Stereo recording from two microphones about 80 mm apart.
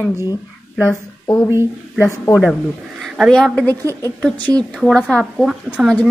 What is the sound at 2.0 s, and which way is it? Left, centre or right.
Speech, left.